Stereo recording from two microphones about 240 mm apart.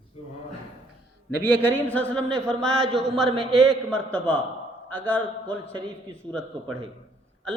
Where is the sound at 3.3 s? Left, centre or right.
Right.